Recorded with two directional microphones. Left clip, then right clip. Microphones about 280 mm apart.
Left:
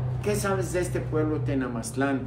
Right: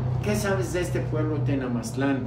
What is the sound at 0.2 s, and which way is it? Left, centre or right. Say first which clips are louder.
Speech: even; centre.